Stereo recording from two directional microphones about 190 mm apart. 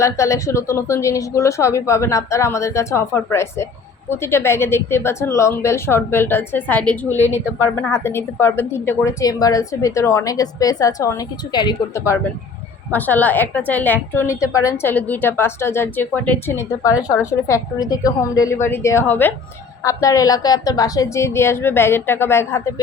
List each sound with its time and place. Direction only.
0.0 s a woman's voice: 15° left (ahead or behind)